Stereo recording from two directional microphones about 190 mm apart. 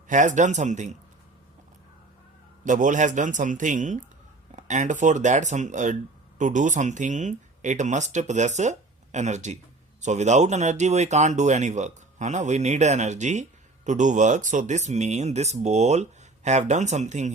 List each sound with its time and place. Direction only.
0.1 s speech: 40° right (ahead or behind)
2.6 s speech: 40° right (ahead or behind)